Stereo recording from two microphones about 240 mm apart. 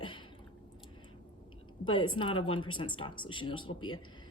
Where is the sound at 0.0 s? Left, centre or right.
Left.